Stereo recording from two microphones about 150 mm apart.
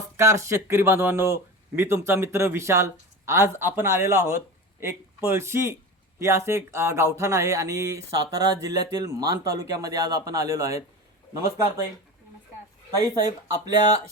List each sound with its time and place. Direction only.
0.2 s speech: 20° right (ahead or behind)
13.1 s speech: 25° right (ahead or behind)